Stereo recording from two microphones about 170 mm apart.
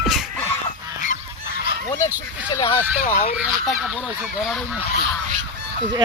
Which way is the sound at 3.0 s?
50° left (ahead or behind).